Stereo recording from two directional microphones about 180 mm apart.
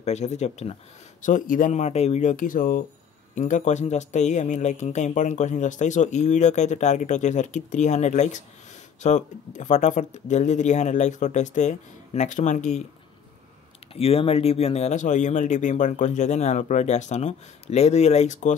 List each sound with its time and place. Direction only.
0.0 s speech: 40° left (ahead or behind)
13.9 s speech: 35° left (ahead or behind)